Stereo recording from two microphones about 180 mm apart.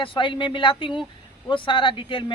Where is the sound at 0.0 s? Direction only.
30° left (ahead or behind).